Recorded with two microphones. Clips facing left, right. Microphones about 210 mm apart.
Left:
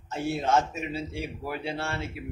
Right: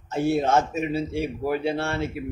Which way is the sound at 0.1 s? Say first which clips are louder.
Right 5 dB; 55° right (ahead or behind).